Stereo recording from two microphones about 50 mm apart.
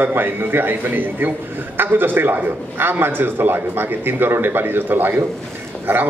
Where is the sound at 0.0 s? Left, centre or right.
Right.